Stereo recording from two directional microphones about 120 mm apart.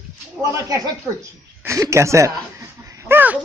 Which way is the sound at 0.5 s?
30° right (ahead or behind).